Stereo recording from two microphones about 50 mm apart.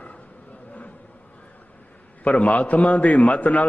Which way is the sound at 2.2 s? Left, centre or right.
Left.